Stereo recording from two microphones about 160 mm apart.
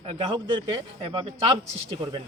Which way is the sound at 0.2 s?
30° right (ahead or behind).